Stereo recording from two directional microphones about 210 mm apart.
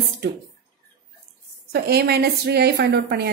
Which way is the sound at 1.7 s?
50° right (ahead or behind).